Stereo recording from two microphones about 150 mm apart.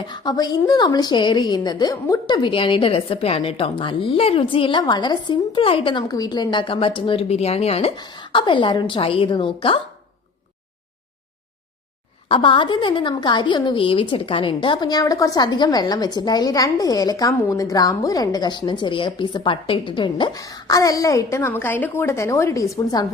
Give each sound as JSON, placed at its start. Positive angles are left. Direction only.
{"t": 0.1, "sound": "a woman's voice", "side_deg": 30}
{"t": 7.9, "sound": "a woman's voice", "side_deg": 30}
{"t": 12.3, "sound": "a woman's voice", "side_deg": 30}